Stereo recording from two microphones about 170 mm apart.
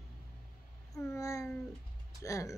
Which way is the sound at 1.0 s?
20° left (ahead or behind).